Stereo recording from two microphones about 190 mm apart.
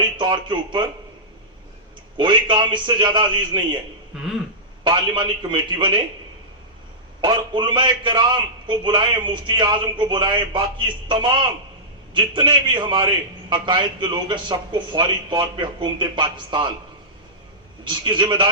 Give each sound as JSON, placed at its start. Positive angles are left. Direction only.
{"t": 0.2, "sound": "a man's voice", "side_deg": -25}
{"t": 2.1, "sound": "a man's voice", "side_deg": -25}
{"t": 4.8, "sound": "a man's voice", "side_deg": -25}
{"t": 7.2, "sound": "a man's voice", "side_deg": -25}
{"t": 17.8, "sound": "a man's voice", "side_deg": -25}